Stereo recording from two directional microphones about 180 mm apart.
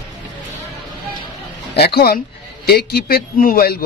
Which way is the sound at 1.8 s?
60° left (ahead or behind).